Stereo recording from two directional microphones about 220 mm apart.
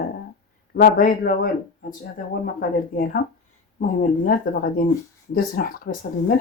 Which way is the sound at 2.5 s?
40° left (ahead or behind).